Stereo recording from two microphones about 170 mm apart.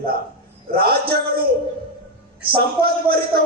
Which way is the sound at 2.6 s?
65° right (ahead or behind).